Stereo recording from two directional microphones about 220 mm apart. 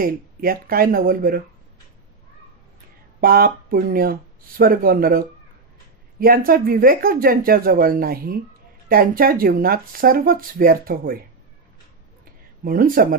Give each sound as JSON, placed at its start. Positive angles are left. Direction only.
{"t": 0.0, "sound": "speech", "side_deg": -40}
{"t": 3.2, "sound": "speech", "side_deg": -40}
{"t": 12.6, "sound": "speech", "side_deg": -40}